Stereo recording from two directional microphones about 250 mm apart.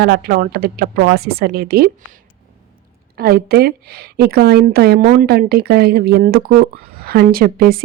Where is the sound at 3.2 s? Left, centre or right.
Right.